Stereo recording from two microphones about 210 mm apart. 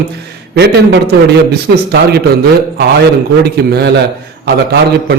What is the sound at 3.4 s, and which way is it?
A man's voice, 50° right (ahead or behind).